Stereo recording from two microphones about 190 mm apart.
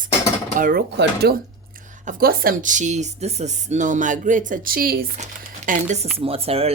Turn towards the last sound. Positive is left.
turn(degrees=-30)  # may be behind; listen again after turning